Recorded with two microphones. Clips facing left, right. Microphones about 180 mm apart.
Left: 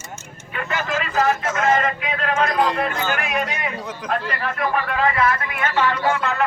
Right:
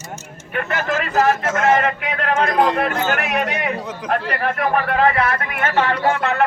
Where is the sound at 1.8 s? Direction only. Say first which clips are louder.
Right 2 dB; 65° right (ahead or behind).